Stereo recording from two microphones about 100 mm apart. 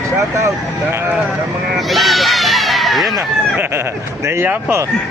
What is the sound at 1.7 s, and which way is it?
Speech, centre (ahead or behind).